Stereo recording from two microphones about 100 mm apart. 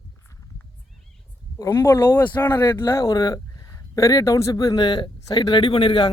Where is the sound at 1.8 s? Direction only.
25° left (ahead or behind); by 6.0 s 65° left (ahead or behind).